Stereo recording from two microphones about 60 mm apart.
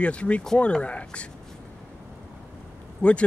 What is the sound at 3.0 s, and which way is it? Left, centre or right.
Speech, left.